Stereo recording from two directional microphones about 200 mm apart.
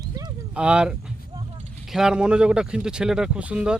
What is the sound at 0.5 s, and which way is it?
Speech, 5° right (ahead or behind).